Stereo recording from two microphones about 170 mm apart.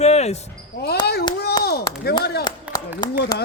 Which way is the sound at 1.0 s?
70° left (ahead or behind).